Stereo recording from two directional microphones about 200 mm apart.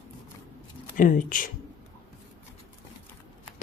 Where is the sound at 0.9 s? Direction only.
40° left (ahead or behind).